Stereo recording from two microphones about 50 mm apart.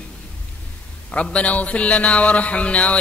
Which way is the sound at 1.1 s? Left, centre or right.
Left.